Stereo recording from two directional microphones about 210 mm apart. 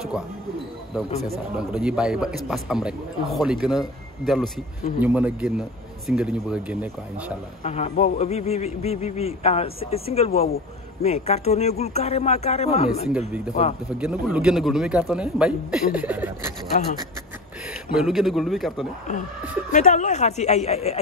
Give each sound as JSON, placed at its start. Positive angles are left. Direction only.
{"t": 1.2, "sound": "a man's voice", "side_deg": 0}
{"t": 7.6, "sound": "a man's voice", "side_deg": 30}
{"t": 13.9, "sound": "a man's voice", "side_deg": -5}
{"t": 17.9, "sound": "a man's voice", "side_deg": 0}
{"t": 19.7, "sound": "a man's voice", "side_deg": 35}